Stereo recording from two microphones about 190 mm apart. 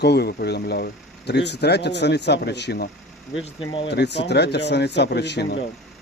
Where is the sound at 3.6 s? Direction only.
30° left (ahead or behind).